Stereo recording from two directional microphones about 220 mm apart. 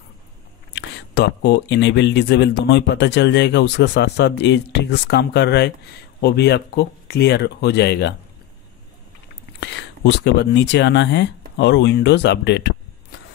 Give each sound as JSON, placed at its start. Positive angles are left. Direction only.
{"t": 0.7, "sound": "speech", "side_deg": 50}
{"t": 9.6, "sound": "speech", "side_deg": 50}